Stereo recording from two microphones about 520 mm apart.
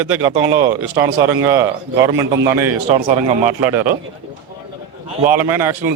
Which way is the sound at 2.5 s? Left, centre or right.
Right.